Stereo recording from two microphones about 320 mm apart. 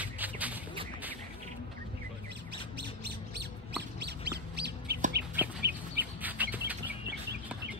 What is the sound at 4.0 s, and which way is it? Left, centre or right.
Bird, right.